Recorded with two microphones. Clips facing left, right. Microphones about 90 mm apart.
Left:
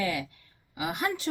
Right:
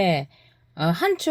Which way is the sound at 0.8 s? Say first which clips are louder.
Right 9 dB; 65° right (ahead or behind).